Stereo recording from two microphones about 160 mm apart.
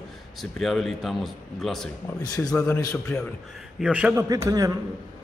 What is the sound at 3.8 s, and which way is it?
Speech, 10° right (ahead or behind).